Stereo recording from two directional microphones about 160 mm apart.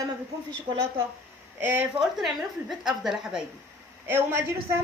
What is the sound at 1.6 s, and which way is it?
Speech, 10° right (ahead or behind).